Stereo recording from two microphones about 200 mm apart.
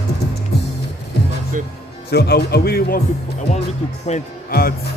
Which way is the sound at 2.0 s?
55° left (ahead or behind).